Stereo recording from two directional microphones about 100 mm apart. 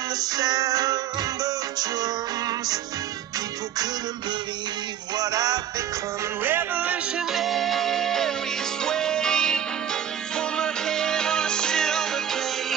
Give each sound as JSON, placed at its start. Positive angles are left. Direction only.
{"t": 0.3, "sound": "music", "side_deg": -40}
{"t": 5.1, "sound": "music", "side_deg": -40}
{"t": 6.4, "sound": "music", "side_deg": -20}
{"t": 7.3, "sound": "music", "side_deg": 0}